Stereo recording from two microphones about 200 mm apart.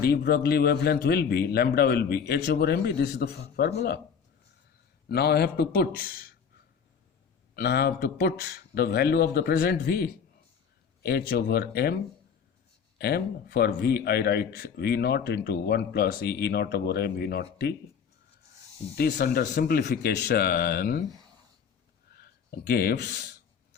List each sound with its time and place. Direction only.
0.0 s speech: 50° left (ahead or behind)
5.0 s speech: 55° left (ahead or behind)
7.5 s speech: 50° left (ahead or behind)
13.0 s speech: 50° left (ahead or behind)
18.9 s speech: 50° left (ahead or behind)
22.1 s speech: 50° left (ahead or behind)